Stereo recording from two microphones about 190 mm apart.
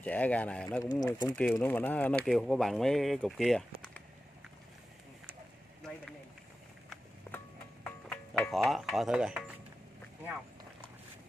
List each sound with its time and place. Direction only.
0.0 s speech: 10° left (ahead or behind)
0.8 s speech: 20° left (ahead or behind)
1.3 s speech: 5° left (ahead or behind)
6.9 s a sound: 10° left (ahead or behind)
8.1 s speech: 5° left (ahead or behind)